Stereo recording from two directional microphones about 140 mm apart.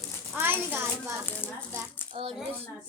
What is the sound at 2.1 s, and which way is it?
Speech, 40° right (ahead or behind).